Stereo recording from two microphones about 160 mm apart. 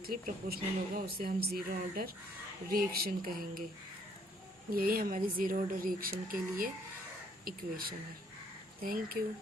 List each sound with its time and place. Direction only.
0.1 s speech: 65° right (ahead or behind)
4.7 s speech: 60° right (ahead or behind)